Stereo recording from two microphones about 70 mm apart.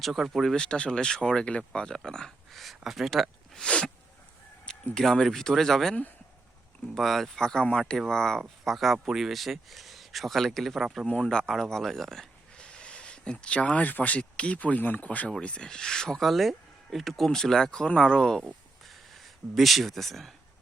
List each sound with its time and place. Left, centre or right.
0.0 s speech: centre
0.5 s speech: centre
3.5 s sniff: centre
4.9 s speech: centre
11.0 s speech: centre
18.4 s a sound: centre